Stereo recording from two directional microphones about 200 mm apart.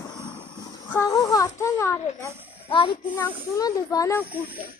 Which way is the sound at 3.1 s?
15° left (ahead or behind).